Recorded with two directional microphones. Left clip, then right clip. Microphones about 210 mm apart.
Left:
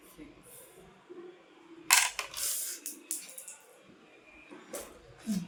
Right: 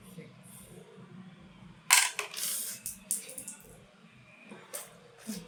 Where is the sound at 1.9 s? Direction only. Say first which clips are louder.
Right 1 dB; centre (ahead or behind).